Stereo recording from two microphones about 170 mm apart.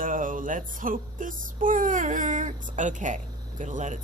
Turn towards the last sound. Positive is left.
turn(degrees=-45)  # may be behind; listen again after turning